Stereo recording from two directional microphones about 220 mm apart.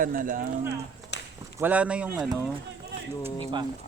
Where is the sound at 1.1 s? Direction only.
50° left (ahead or behind).